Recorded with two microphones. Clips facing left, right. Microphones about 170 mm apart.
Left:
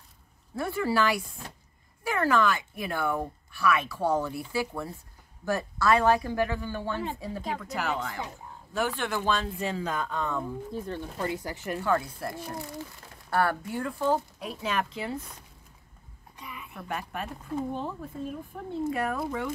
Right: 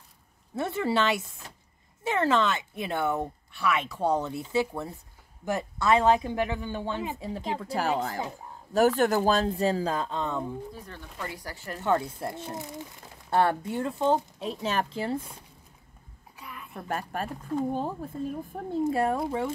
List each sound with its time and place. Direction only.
0.6 s speech: 25° right (ahead or behind)
10.7 s speech: 30° left (ahead or behind)
11.8 s speech: 25° right (ahead or behind)
16.3 s a sound: centre (ahead or behind)
16.7 s speech: 40° right (ahead or behind)